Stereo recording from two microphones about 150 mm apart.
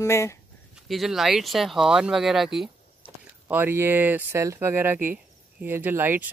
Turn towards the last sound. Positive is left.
turn(degrees=-15)  # may be behind; listen again after turning